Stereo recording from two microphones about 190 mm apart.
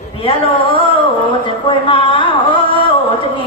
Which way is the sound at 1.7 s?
25° left (ahead or behind).